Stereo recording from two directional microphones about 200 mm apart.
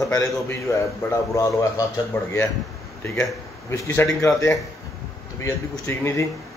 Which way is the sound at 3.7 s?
15° left (ahead or behind).